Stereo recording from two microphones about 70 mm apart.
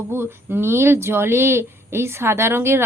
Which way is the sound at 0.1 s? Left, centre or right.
Right.